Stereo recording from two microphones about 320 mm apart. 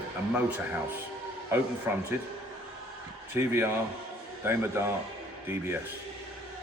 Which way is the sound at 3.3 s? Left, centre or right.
Centre.